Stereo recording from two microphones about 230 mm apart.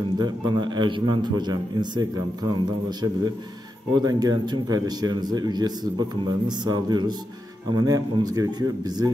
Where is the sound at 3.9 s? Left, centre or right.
Centre.